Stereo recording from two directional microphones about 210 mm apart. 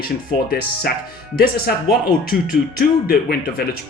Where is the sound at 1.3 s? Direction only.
45° left (ahead or behind).